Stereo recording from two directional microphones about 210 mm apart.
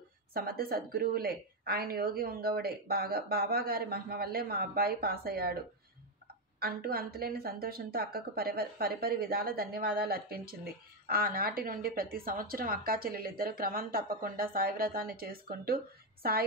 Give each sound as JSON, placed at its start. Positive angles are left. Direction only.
{"t": 0.3, "sound": "a woman's voice", "side_deg": -45}
{"t": 6.6, "sound": "a woman's voice", "side_deg": -45}